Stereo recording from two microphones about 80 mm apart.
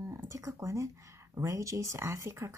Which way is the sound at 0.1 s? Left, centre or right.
Right.